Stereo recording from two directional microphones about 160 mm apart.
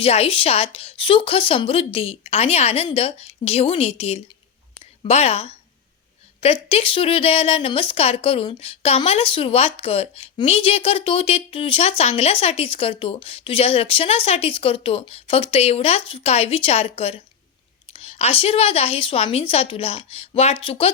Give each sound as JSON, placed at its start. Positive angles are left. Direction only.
{"t": 0.0, "sound": "speech", "side_deg": 40}